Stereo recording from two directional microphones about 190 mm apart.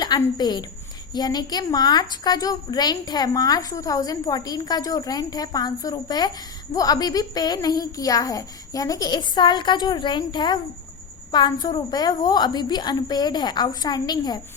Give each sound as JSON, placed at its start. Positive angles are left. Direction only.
{"t": 0.0, "sound": "a woman's voice", "side_deg": 20}